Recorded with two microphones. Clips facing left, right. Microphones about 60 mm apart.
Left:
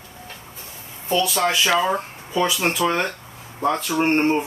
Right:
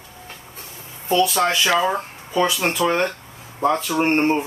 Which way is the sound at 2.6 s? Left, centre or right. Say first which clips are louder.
Right 1 dB; centre.